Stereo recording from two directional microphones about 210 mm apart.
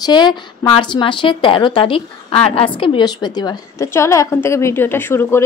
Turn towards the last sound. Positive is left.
turn(degrees=10)  # may be behind; listen again after turning